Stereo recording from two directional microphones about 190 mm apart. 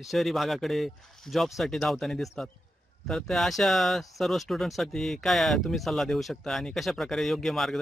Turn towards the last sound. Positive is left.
turn(degrees=0)  # may be behind; listen again after turning